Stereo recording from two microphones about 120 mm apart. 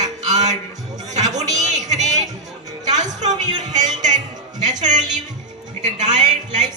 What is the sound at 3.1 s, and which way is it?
Speech, 80° right.